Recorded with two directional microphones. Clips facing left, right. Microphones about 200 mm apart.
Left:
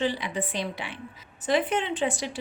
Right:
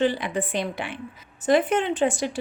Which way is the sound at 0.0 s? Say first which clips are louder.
Right 5 dB; 55° right (ahead or behind).